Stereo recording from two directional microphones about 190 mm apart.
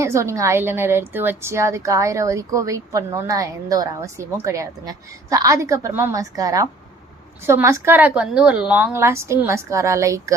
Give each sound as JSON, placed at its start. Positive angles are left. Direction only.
{"t": 0.0, "sound": "a woman's voice", "side_deg": -15}